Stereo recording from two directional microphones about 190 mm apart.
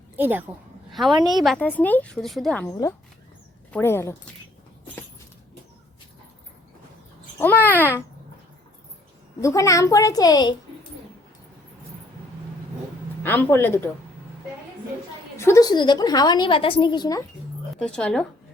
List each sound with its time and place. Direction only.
0.2 s a woman's voice: 10° right (ahead or behind)
1.1 s a woman's voice: 20° right (ahead or behind)
1.4 s a woman's voice: 5° left (ahead or behind)
2.6 s a woman's voice: 20° left (ahead or behind)
7.3 s speech: 10° left (ahead or behind)
9.4 s speech: 15° left (ahead or behind)
13.2 s speech: 10° left (ahead or behind)
15.4 s a woman's voice: 15° left (ahead or behind)
17.7 s a woman's voice: 5° left (ahead or behind)